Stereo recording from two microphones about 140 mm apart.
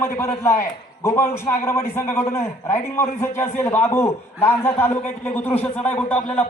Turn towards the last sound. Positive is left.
turn(degrees=10)  # may be behind; listen again after turning